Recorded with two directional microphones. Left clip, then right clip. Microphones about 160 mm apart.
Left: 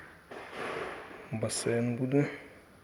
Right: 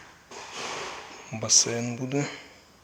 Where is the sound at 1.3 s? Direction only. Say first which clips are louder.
Right 8 dB; 10° right (ahead or behind).